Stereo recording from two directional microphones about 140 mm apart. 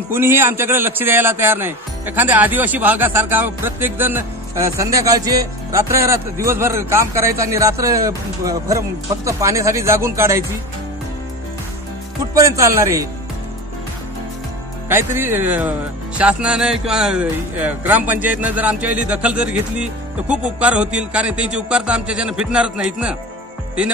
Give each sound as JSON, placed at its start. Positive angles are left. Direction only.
{"t": 0.1, "sound": "speech", "side_deg": -15}
{"t": 12.4, "sound": "speech", "side_deg": -20}
{"t": 14.9, "sound": "speech", "side_deg": -15}